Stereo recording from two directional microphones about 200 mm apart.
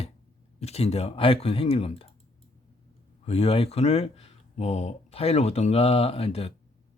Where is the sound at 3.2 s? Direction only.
30° left (ahead or behind).